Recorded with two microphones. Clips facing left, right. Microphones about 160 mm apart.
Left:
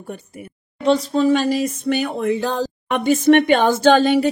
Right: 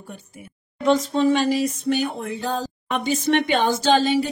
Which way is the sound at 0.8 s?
35° left (ahead or behind).